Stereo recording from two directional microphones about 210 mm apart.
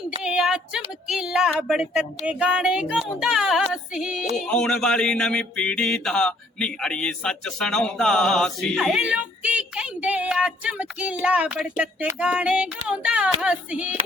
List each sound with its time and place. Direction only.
0.2 s mantra: 5° right (ahead or behind)